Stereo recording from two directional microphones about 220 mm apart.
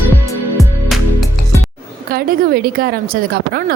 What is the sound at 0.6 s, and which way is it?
Music, centre (ahead or behind).